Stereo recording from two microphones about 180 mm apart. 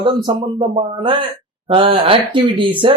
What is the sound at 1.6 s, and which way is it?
Speech, 30° right (ahead or behind).